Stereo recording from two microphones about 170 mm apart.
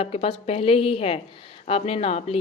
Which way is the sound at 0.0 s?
35° left (ahead or behind).